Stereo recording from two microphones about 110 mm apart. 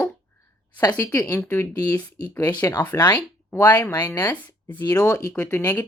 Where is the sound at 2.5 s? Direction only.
35° left (ahead or behind).